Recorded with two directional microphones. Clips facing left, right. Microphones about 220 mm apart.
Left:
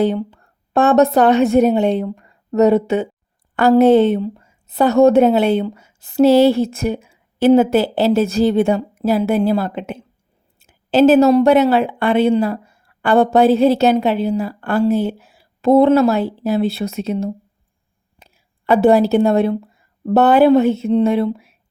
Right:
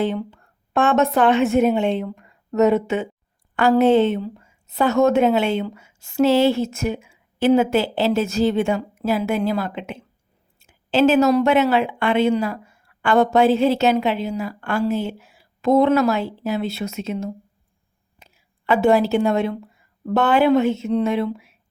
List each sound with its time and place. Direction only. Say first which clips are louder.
0.0 s a woman's voice: left 5 dB; 35° left (ahead or behind)